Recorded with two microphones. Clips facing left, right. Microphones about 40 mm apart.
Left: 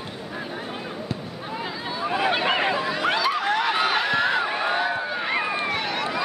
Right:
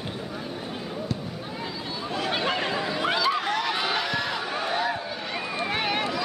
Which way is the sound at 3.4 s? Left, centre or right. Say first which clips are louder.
Left 4 dB; left.